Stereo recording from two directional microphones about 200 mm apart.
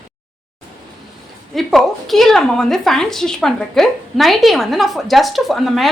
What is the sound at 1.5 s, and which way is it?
A woman's voice, centre (ahead or behind).